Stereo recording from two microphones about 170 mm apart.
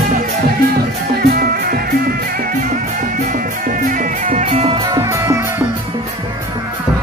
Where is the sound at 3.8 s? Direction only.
50° right (ahead or behind).